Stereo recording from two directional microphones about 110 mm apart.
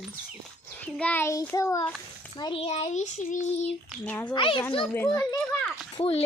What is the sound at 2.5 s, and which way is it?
Child singing, 70° left (ahead or behind).